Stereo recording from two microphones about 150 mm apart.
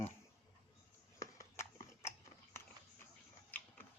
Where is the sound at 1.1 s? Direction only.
20° left (ahead or behind).